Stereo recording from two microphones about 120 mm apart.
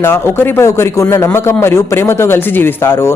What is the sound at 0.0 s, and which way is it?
Speech, 20° left (ahead or behind).